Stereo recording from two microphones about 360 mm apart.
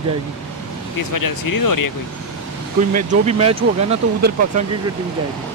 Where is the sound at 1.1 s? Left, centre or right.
Left.